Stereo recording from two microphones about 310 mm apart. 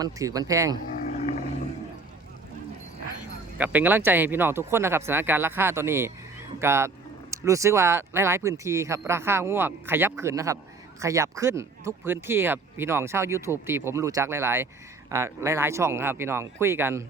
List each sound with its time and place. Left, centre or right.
0.0 s speech: centre
0.9 s roaring cats: left
3.6 s speech: centre